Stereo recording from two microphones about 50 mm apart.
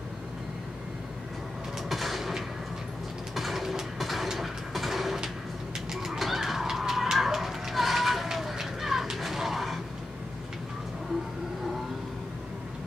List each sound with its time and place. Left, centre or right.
1.9 s a sound: centre
3.3 s train: centre
5.9 s bird: centre
9.1 s music: centre